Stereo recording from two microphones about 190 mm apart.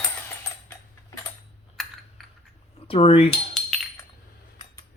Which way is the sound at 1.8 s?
Centre (ahead or behind).